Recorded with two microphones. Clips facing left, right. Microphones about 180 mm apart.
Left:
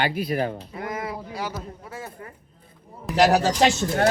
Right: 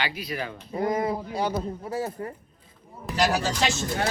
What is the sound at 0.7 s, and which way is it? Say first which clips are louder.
A man's voice: right 6 dB; 25° right (ahead or behind).